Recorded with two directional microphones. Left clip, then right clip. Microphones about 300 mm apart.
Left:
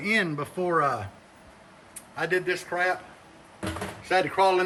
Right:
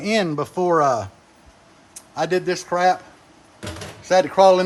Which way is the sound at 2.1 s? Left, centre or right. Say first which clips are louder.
Right 5 dB; centre.